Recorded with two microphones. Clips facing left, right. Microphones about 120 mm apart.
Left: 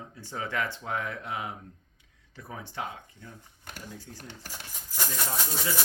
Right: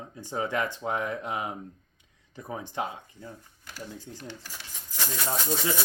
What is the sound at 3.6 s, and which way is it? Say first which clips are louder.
Speech: right 2 dB; 50° left (ahead or behind).